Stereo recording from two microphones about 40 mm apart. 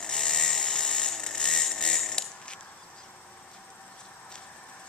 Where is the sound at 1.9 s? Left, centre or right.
Centre.